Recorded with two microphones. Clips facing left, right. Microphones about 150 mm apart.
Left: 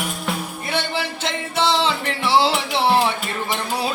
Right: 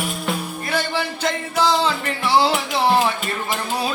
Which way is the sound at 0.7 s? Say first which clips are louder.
Right 1 dB; 25° left (ahead or behind).